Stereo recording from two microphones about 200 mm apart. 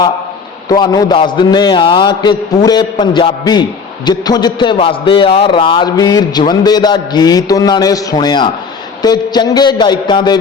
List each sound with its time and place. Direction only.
0.7 s a man's voice: 20° left (ahead or behind)